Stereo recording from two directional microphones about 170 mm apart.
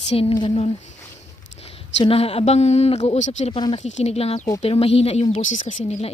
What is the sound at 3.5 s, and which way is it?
A woman's voice, 30° left (ahead or behind).